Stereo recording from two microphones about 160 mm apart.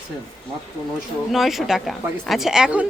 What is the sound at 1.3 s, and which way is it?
Speech, centre (ahead or behind).